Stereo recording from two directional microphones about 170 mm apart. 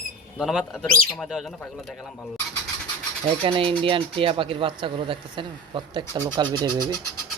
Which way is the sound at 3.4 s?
30° right (ahead or behind).